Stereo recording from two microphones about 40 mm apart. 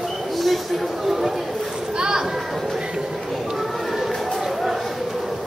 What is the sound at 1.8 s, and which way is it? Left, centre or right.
Children playing, centre.